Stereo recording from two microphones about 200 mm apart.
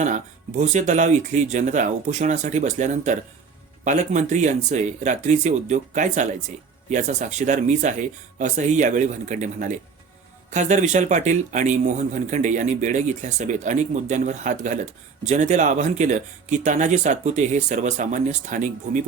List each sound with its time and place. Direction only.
0.0 s speech: 35° right (ahead or behind)